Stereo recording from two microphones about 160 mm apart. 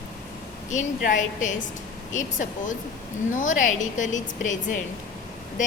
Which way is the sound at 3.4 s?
55° left (ahead or behind).